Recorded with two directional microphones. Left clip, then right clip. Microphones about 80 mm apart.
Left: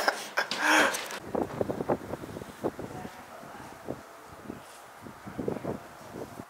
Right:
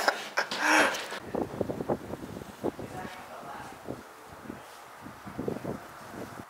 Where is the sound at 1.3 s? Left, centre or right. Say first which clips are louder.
Left 2 dB; right.